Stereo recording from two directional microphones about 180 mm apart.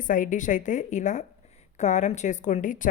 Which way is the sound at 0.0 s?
45° left (ahead or behind).